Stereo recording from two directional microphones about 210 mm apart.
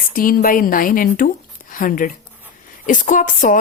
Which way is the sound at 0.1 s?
40° left (ahead or behind).